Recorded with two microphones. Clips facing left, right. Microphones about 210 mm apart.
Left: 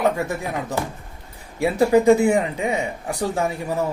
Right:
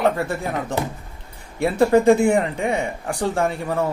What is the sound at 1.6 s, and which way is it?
Speech, 5° left (ahead or behind).